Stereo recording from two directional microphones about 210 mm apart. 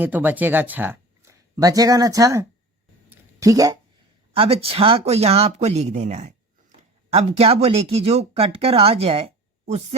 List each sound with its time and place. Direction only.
0.0 s speech: 10° right (ahead or behind)
3.1 s a sound: 15° right (ahead or behind)
4.4 s speech: 25° right (ahead or behind)